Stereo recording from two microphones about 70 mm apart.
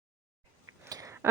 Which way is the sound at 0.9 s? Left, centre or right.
Right.